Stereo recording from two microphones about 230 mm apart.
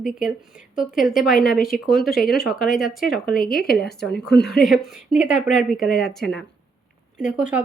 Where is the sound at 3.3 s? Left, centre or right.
Left.